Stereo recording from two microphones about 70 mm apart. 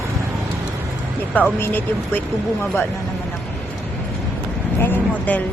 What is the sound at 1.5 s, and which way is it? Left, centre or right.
Speech, left.